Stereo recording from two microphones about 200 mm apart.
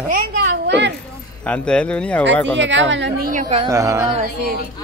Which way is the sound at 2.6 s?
65° right (ahead or behind).